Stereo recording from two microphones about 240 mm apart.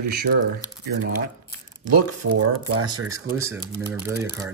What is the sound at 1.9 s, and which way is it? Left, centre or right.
Speech, right.